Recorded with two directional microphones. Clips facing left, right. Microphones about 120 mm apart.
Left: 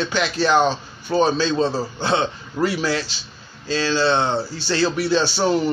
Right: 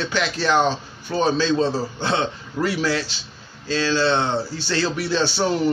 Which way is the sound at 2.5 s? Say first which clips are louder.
Left 1 dB; 20° left (ahead or behind).